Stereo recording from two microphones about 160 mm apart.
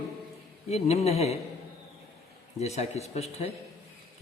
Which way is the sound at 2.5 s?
40° left (ahead or behind).